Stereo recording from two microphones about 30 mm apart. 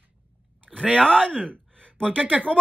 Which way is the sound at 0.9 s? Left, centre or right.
Left.